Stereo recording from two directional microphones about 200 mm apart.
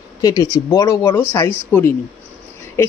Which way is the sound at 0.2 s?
15° left (ahead or behind).